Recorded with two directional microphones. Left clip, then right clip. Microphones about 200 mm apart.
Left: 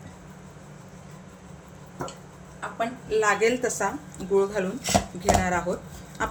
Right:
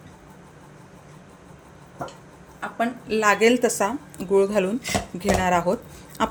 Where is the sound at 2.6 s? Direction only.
45° right (ahead or behind).